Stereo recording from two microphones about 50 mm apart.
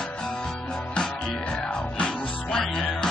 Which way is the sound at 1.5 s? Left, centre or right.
Centre.